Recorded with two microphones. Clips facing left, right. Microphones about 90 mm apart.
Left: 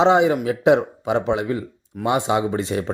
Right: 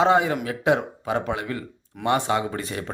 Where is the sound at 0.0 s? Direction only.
20° left (ahead or behind).